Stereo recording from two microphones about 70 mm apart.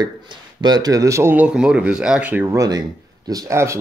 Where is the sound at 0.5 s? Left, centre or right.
Right.